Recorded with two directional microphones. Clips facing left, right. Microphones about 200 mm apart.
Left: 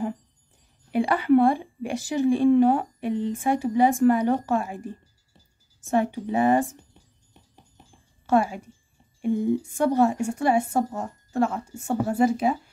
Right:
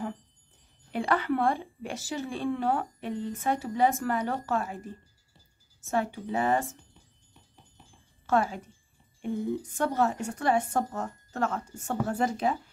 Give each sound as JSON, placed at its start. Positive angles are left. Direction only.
{"t": 0.9, "sound": "a woman's voice", "side_deg": 10}
{"t": 5.8, "sound": "a woman's voice", "side_deg": 15}
{"t": 8.3, "sound": "a woman's voice", "side_deg": 10}